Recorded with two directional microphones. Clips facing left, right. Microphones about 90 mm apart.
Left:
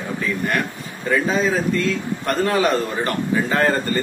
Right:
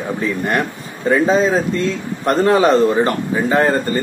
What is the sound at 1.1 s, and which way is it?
A man's voice, 30° right (ahead or behind).